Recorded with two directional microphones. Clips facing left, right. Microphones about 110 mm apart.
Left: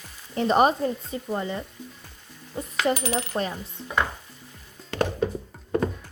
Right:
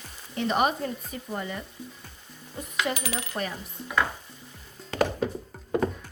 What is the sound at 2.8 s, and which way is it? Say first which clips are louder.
Coin: left 5 dB; 40° left (ahead or behind).